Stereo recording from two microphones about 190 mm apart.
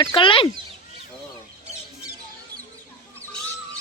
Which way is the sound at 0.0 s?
25° left (ahead or behind).